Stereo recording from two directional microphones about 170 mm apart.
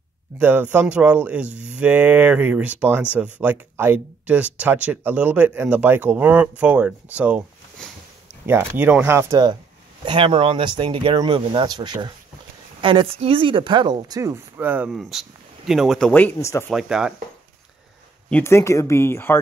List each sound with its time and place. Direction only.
0.4 s speech: 10° right (ahead or behind)
8.5 s speech: 10° right (ahead or behind)
10.0 s speech: 30° right (ahead or behind); by 16.7 s 15° left (ahead or behind)
16.7 s speech: 5° right (ahead or behind)
18.3 s speech: 15° left (ahead or behind)